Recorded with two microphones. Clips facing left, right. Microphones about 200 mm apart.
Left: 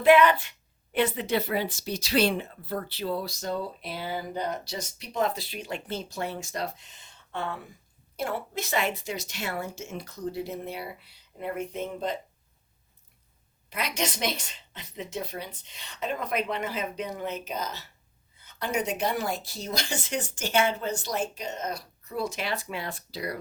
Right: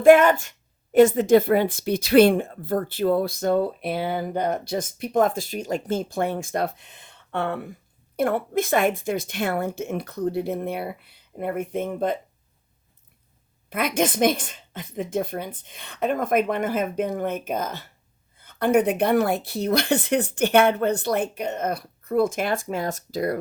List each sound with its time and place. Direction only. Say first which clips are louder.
0.0 s a woman's voice: right 5 dB; 45° right (ahead or behind)
13.7 s a woman's voice: right 8 dB; 50° right (ahead or behind)